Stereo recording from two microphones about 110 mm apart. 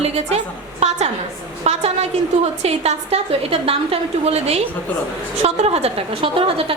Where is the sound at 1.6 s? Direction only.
75° right (ahead or behind).